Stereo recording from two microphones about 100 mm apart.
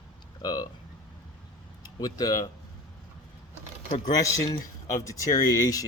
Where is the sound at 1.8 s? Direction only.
45° left (ahead or behind).